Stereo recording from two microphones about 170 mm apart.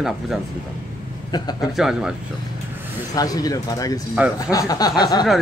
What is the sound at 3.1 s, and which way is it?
Speech, 20° left (ahead or behind).